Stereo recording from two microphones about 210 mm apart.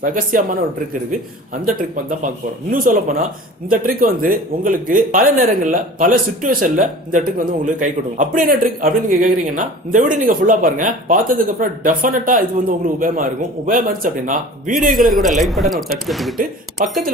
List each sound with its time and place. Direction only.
0.0 s speech: 40° right (ahead or behind)
1.6 s speech: 40° right (ahead or behind)
15.1 s speech: centre (ahead or behind)